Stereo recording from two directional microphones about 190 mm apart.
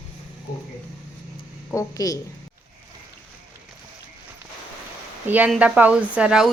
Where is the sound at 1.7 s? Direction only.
20° left (ahead or behind).